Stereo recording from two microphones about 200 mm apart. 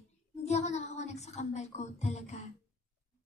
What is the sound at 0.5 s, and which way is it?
Speech, 35° left (ahead or behind).